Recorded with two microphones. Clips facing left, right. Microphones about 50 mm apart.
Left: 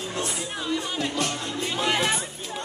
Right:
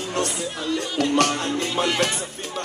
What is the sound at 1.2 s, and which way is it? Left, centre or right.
Music, right.